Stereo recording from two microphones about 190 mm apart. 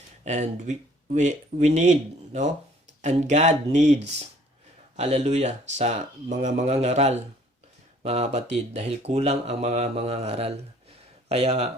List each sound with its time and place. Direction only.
0.3 s speech: 40° right (ahead or behind)
4.9 s speech: 35° right (ahead or behind)